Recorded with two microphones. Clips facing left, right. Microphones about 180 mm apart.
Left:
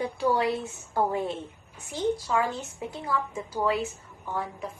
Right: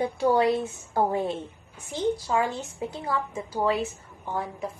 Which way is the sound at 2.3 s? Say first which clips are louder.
Right 1 dB; 20° right (ahead or behind).